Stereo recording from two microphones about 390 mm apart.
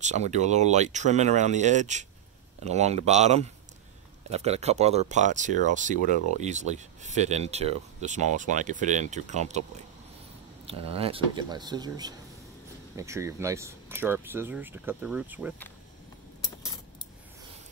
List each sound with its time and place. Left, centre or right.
0.0 s speech: centre
10.7 s speech: centre